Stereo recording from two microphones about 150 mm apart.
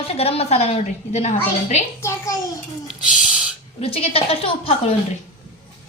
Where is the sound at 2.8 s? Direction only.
5° right (ahead or behind).